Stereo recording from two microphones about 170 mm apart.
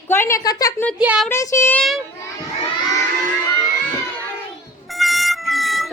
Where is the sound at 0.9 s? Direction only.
5° right (ahead or behind).